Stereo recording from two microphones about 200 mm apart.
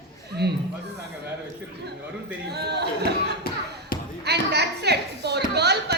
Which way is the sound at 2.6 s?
55° right (ahead or behind).